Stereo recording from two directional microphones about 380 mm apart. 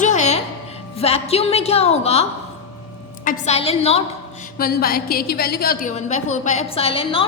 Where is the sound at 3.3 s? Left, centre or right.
Centre.